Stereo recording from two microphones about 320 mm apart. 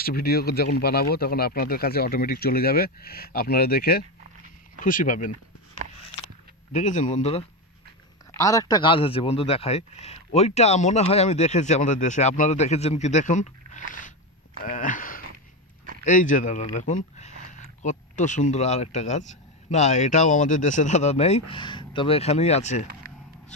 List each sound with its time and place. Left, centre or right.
0.0 s speech: left
6.7 s speech: left